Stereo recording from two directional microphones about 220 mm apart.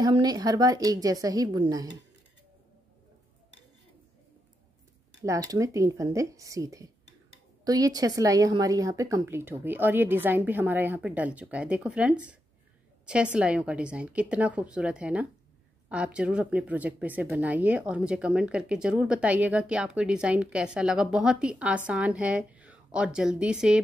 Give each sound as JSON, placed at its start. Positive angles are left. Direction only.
{"t": 0.0, "sound": "a woman's voice", "side_deg": -20}
{"t": 5.2, "sound": "a woman's voice", "side_deg": -15}